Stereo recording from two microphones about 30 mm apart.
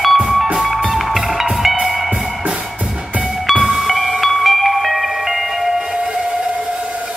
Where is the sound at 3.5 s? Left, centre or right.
Right.